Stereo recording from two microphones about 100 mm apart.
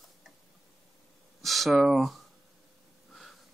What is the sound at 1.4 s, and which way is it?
Speech, centre (ahead or behind).